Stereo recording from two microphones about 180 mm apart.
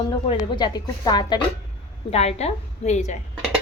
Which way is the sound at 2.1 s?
35° left (ahead or behind).